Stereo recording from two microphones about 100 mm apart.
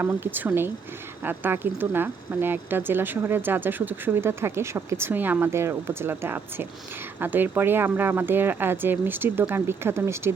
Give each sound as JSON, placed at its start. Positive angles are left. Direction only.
{"t": 0.0, "sound": "speech", "side_deg": -20}